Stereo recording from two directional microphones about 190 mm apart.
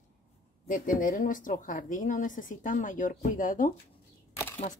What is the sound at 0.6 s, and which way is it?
A woman's voice, 45° left (ahead or behind).